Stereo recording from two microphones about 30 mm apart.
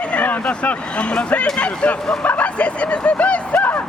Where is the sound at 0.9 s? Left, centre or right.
Left.